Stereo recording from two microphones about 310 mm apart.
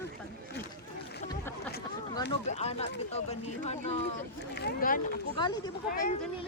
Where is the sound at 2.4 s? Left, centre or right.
Left.